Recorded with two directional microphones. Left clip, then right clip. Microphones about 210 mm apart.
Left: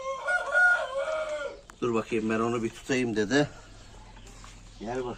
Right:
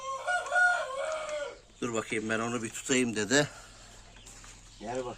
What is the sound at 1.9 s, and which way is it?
Speech, 35° right (ahead or behind).